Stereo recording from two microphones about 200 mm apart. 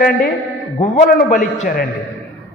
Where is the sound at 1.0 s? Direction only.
55° left (ahead or behind).